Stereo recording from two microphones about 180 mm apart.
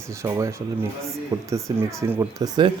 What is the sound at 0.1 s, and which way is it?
Speech, 15° right (ahead or behind).